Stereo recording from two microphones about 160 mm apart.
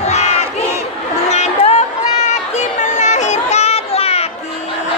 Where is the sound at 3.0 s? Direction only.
45° left (ahead or behind).